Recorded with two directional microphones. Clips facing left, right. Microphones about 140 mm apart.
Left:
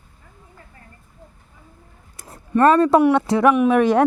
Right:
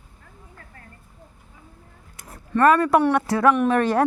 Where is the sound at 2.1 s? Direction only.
35° left (ahead or behind).